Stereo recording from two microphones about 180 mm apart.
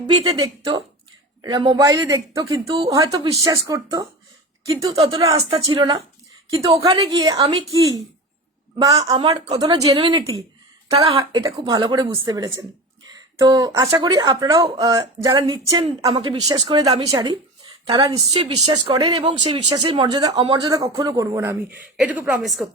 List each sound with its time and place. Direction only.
0.3 s speech: 20° right (ahead or behind)
4.9 s a woman's voice: 30° right (ahead or behind)
8.8 s speech: 20° right (ahead or behind)
10.8 s speech: 35° right (ahead or behind)
11.2 s a woman's voice: 20° right (ahead or behind); by 17.1 s 35° right (ahead or behind)
17.1 s a woman's voice: 25° right (ahead or behind); by 22.6 s 5° right (ahead or behind)